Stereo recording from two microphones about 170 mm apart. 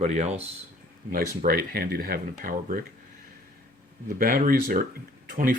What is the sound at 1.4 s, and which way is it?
Speech, 60° right (ahead or behind).